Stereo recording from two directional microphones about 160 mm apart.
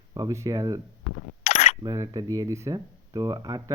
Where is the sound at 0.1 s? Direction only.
25° right (ahead or behind).